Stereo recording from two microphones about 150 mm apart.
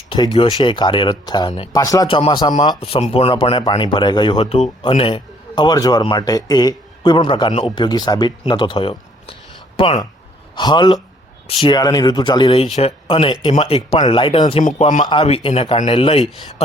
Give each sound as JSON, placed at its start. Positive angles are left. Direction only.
{"t": 0.3, "sound": "speech", "side_deg": 35}
{"t": 1.8, "sound": "speech", "side_deg": 25}
{"t": 2.0, "sound": "speech", "side_deg": 35}
{"t": 2.8, "sound": "speech", "side_deg": 40}
{"t": 14.8, "sound": "speech", "side_deg": 55}
{"t": 15.0, "sound": "speech", "side_deg": 35}